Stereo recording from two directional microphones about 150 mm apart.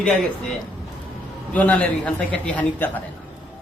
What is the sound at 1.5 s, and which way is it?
A man's voice, 10° left (ahead or behind).